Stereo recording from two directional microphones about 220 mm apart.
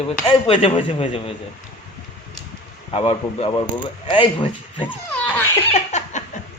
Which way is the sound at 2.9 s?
25° left (ahead or behind).